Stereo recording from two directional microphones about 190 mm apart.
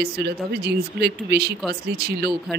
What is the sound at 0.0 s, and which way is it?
Speech, 60° right (ahead or behind).